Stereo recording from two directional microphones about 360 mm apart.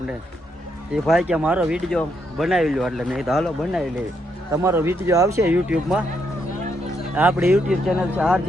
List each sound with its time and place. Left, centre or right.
1.0 s speech: centre
7.2 s speech: centre